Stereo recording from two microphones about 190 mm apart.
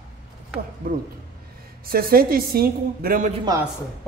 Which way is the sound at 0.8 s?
50° right (ahead or behind).